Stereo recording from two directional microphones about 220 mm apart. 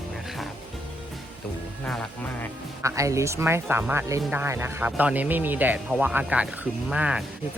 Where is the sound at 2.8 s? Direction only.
15° right (ahead or behind).